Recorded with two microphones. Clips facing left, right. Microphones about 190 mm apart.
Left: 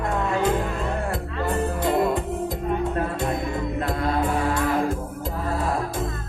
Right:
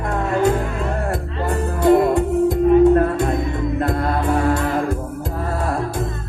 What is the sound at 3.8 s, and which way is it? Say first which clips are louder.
Music: right 3 dB; 50° right (ahead or behind).